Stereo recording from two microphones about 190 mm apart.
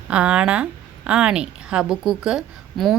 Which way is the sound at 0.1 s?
5° right (ahead or behind).